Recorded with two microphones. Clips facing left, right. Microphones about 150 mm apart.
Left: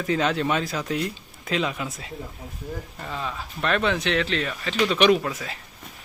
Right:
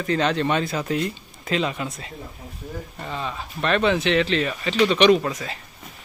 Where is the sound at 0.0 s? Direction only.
5° left (ahead or behind).